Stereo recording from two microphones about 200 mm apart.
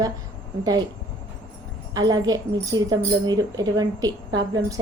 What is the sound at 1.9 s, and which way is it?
A woman's voice, 20° right (ahead or behind).